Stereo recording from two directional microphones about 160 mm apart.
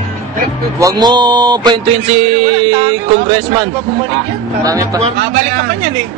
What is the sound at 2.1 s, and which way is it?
Speech, 40° right (ahead or behind).